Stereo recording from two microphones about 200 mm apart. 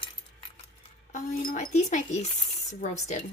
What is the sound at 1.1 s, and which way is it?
Speech, 45° left (ahead or behind).